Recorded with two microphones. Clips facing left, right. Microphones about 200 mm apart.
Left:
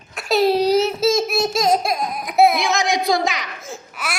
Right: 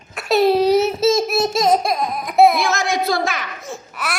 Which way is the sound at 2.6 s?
15° left (ahead or behind).